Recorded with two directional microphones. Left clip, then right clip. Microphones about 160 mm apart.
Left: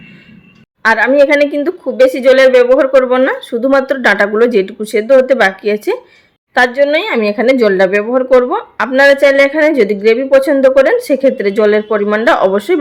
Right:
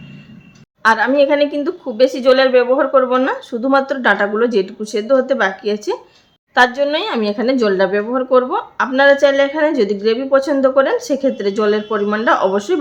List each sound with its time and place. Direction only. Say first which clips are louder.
0.8 s a woman's voice: left 4 dB; 20° left (ahead or behind)